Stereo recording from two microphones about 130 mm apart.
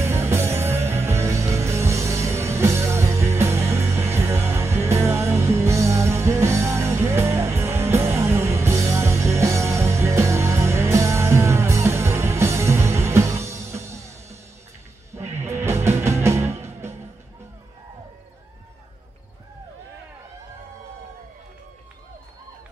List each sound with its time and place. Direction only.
0.0 s music: 20° right (ahead or behind)